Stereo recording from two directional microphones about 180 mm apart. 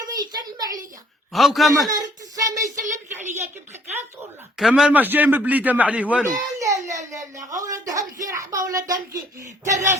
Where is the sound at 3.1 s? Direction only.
40° right (ahead or behind).